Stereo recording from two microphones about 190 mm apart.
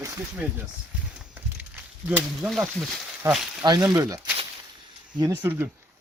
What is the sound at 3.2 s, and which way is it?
Speech, 15° right (ahead or behind).